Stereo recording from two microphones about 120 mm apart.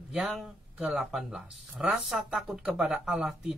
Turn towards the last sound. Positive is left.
turn(degrees=-5)  # may be behind; listen again after turning